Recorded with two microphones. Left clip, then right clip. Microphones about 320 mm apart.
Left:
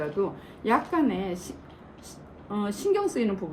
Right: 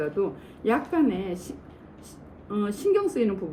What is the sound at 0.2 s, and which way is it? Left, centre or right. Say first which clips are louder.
A woman's voice: right 1 dB; centre.